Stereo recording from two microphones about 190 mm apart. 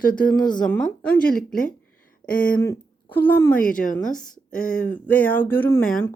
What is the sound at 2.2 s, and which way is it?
Speech, 50° left (ahead or behind).